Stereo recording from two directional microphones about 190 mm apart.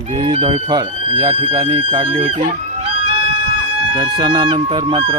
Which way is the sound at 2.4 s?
35° right (ahead or behind).